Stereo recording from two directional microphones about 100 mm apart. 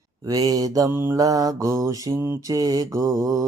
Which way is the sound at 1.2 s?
35° right (ahead or behind).